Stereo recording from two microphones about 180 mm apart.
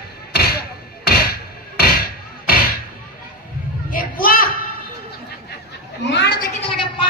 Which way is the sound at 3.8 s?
50° left (ahead or behind).